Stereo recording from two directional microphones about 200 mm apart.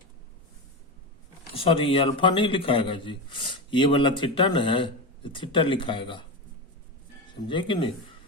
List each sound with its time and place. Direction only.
1.5 s a man's voice: 25° left (ahead or behind)
7.4 s a man's voice: 25° left (ahead or behind)